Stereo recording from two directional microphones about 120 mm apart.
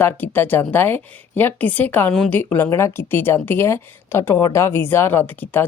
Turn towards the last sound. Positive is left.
turn(degrees=15)  # may be behind; listen again after turning